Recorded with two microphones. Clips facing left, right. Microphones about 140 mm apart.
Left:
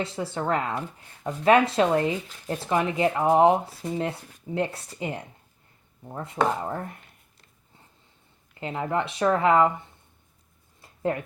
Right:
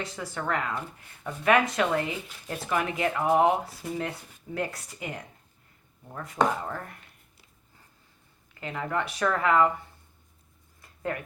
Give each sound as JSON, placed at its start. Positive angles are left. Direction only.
{"t": 0.0, "sound": "speech", "side_deg": 25}
{"t": 8.5, "sound": "speech", "side_deg": 25}
{"t": 10.8, "sound": "a sound", "side_deg": 25}